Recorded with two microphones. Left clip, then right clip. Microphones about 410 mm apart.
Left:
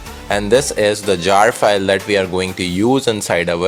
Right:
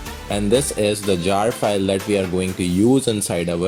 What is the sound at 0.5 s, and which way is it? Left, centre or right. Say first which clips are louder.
Speech: left 5 dB; centre.